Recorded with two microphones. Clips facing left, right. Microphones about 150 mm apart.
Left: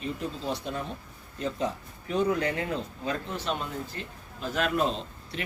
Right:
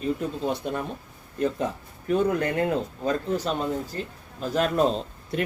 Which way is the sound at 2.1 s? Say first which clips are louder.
Right 3 dB; 50° right (ahead or behind).